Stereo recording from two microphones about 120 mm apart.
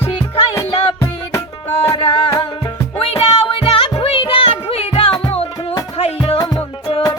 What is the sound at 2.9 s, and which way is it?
Music, 55° left (ahead or behind).